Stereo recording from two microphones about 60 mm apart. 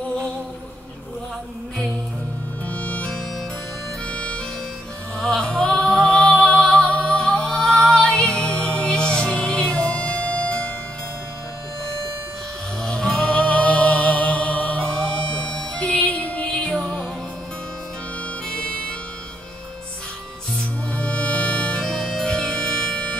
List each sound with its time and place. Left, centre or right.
2.6 s music: left
12.8 s music: centre
18.5 s music: centre
20.5 s music: left
21.9 s music: centre